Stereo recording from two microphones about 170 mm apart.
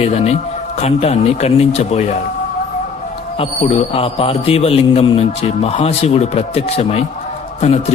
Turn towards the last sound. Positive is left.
turn(degrees=40)  # may be behind; listen again after turning